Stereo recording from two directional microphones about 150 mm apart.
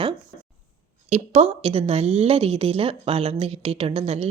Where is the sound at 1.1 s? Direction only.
45° right (ahead or behind).